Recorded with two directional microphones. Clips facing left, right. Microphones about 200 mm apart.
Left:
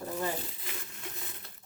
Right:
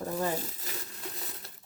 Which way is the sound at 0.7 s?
40° right (ahead or behind).